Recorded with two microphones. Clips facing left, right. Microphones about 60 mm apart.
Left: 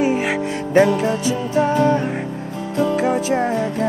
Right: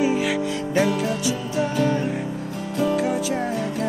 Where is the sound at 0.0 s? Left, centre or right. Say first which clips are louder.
Left 2 dB; left.